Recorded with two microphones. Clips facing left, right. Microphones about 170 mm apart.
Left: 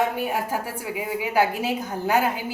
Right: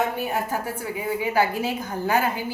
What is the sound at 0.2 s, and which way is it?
A woman's voice, 10° left (ahead or behind).